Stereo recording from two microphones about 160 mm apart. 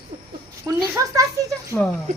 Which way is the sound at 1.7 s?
10° left (ahead or behind).